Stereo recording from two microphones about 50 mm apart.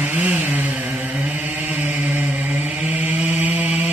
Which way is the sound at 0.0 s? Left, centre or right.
Right.